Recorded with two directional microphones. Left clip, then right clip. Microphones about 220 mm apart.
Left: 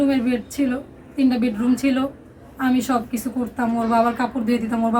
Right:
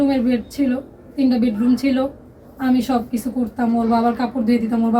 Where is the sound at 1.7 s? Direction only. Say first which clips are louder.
Right 1 dB; centre (ahead or behind).